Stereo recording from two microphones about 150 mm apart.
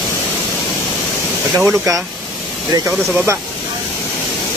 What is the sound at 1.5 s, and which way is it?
Speech, 15° right (ahead or behind).